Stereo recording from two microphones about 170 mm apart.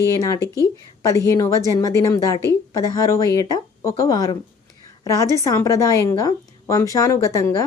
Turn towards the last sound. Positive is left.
turn(degrees=20)  # may be behind; listen again after turning